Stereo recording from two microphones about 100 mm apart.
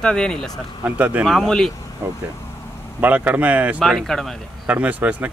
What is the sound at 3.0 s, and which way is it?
Speech, 15° right (ahead or behind).